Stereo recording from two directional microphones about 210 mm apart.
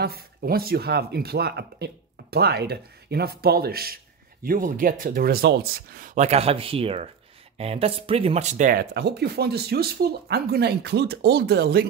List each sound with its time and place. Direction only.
0.0 s speech: 50° right (ahead or behind)
8.9 s speech: 50° right (ahead or behind)